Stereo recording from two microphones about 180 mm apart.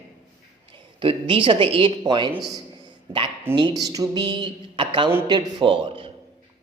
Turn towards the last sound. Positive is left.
turn(degrees=-30)  # may be behind; listen again after turning